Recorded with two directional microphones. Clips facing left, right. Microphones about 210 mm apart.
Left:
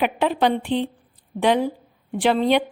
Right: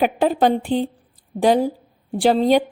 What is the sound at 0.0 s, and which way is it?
A woman's voice, 40° right (ahead or behind).